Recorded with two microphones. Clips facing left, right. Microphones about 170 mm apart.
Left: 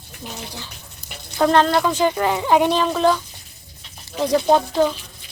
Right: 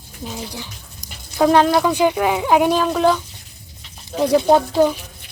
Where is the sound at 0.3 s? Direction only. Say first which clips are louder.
Right 4 dB; 15° right (ahead or behind).